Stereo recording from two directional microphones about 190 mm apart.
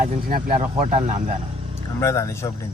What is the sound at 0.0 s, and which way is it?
Speech, 50° right (ahead or behind).